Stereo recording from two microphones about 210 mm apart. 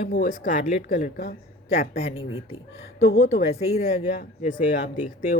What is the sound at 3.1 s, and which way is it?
Speech, 40° left (ahead or behind).